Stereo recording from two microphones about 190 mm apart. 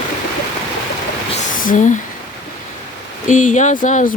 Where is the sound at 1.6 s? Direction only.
45° left (ahead or behind).